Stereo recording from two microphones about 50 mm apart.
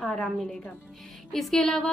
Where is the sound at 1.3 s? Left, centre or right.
Centre.